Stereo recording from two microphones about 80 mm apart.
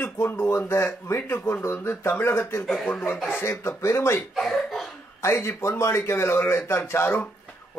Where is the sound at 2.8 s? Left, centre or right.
Centre.